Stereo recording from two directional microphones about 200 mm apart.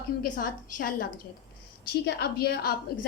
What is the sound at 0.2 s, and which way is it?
Speech, 45° left (ahead or behind).